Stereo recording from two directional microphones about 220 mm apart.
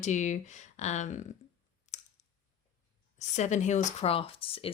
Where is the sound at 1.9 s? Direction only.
30° left (ahead or behind).